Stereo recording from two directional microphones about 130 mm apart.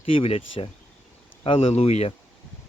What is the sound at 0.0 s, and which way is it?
Speech, 45° left (ahead or behind).